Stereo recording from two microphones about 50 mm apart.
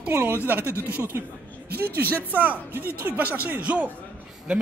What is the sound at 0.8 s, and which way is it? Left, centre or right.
Speech, right.